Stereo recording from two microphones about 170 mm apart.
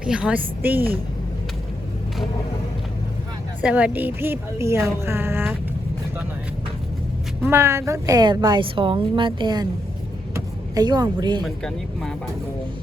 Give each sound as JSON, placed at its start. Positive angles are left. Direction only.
{"t": 0.0, "sound": "a woman's voice", "side_deg": -5}
{"t": 3.6, "sound": "a woman's voice", "side_deg": -5}
{"t": 7.4, "sound": "a woman's voice", "side_deg": -15}
{"t": 11.4, "sound": "speech", "side_deg": 5}